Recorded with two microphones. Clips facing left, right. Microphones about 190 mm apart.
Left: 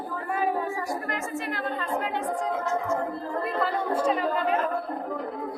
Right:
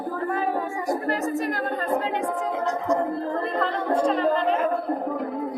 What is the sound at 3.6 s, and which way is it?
Chatter, 5° left (ahead or behind).